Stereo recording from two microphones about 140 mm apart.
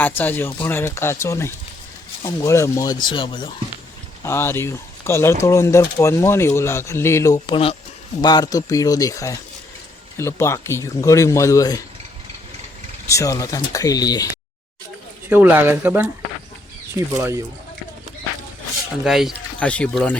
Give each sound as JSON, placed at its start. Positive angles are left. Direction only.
{"t": 0.2, "sound": "speech", "side_deg": 15}
{"t": 3.1, "sound": "speech", "side_deg": 35}
{"t": 4.2, "sound": "speech", "side_deg": 20}
{"t": 8.2, "sound": "speech", "side_deg": 30}
{"t": 13.1, "sound": "speech", "side_deg": 25}
{"t": 15.3, "sound": "speech", "side_deg": -15}
{"t": 19.0, "sound": "speech", "side_deg": 0}
{"t": 19.5, "sound": "speech", "side_deg": 10}